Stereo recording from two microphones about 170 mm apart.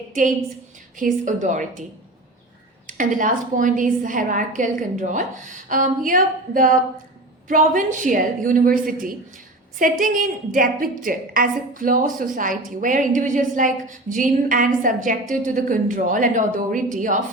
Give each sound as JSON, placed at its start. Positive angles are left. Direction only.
{"t": 0.1, "sound": "a woman's voice", "side_deg": -50}
{"t": 2.8, "sound": "a woman's voice", "side_deg": -50}